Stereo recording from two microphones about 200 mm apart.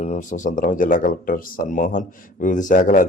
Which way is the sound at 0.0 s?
40° left (ahead or behind).